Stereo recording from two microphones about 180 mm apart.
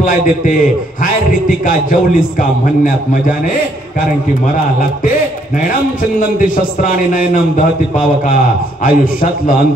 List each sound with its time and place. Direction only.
0.0 s a man's voice: 50° left (ahead or behind)
6.1 s a man's voice: 50° left (ahead or behind)
8.8 s a man's voice: 50° left (ahead or behind)